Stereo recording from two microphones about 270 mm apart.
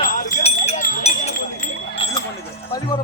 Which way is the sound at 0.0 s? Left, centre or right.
Left.